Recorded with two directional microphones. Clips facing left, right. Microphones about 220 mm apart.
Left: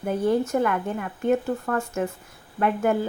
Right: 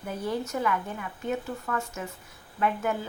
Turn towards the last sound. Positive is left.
turn(degrees=50)  # may be behind; listen again after turning